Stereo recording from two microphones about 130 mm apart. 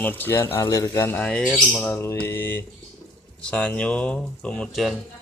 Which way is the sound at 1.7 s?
15° left (ahead or behind).